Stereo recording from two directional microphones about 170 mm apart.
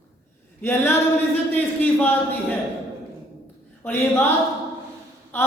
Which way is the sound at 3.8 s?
15° left (ahead or behind).